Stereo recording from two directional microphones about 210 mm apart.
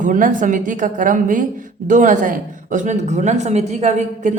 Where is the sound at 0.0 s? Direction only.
40° right (ahead or behind).